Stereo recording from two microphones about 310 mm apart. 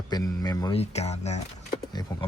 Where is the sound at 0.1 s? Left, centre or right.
Centre.